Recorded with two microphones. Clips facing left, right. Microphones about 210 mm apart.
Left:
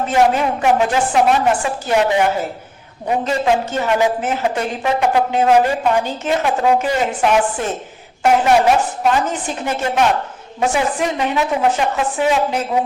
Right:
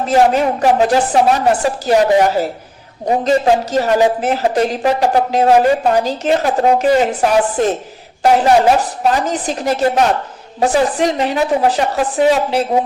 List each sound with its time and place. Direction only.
0.1 s a woman's voice: 40° right (ahead or behind)